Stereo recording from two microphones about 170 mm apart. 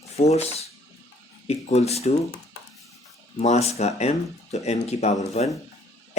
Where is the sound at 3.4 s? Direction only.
40° left (ahead or behind).